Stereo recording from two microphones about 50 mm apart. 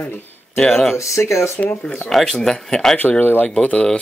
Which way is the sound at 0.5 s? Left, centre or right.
Centre.